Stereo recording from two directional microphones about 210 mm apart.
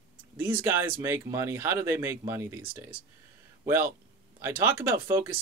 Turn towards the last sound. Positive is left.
turn(degrees=-10)  # may be behind; listen again after turning